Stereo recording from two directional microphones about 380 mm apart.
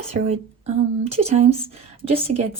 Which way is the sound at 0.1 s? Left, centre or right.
Centre.